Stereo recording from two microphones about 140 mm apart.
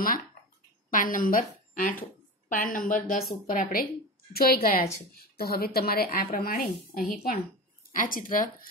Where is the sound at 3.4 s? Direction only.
85° left.